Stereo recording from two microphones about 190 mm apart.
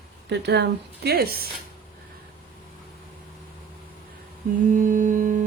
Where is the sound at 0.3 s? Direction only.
60° right (ahead or behind).